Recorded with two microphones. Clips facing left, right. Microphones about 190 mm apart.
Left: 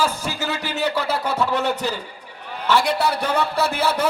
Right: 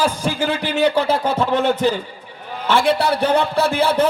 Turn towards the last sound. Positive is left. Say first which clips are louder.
# right 4 dB
turn(degrees=-30)  # may be behind; listen again after turning